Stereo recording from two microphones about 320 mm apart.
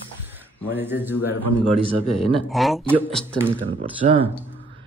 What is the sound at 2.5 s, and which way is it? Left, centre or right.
Speech, centre.